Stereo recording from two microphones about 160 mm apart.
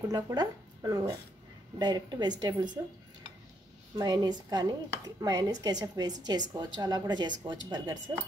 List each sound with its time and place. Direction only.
0.1 s a woman's voice: 25° right (ahead or behind)
3.9 s a woman's voice: 25° right (ahead or behind)